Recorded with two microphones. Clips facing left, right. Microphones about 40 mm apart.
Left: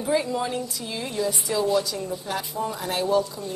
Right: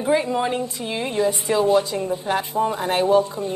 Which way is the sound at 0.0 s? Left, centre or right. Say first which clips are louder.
Right 4 dB; right.